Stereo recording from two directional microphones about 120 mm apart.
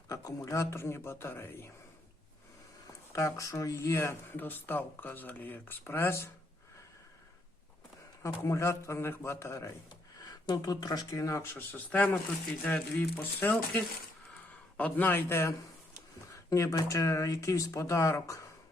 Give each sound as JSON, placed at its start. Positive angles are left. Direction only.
{"t": 0.1, "sound": "speech", "side_deg": 25}
{"t": 2.8, "sound": "speech", "side_deg": 25}
{"t": 8.2, "sound": "speech", "side_deg": 25}
{"t": 10.4, "sound": "speech", "side_deg": 35}